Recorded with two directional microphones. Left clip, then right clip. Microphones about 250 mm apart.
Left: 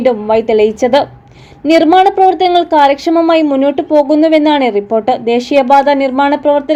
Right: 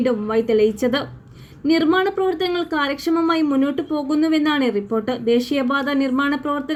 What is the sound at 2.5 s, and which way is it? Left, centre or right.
Speech, centre.